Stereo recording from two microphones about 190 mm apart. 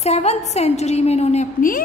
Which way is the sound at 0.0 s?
35° left (ahead or behind).